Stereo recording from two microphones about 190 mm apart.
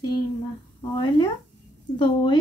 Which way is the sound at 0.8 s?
25° left (ahead or behind).